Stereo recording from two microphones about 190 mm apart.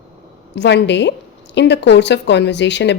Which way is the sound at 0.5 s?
65° left (ahead or behind).